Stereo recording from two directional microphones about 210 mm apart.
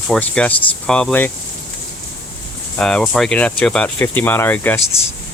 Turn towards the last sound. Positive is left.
turn(degrees=10)  # may be behind; listen again after turning